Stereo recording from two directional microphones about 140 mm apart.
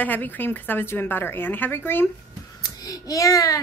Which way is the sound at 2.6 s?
25° left (ahead or behind).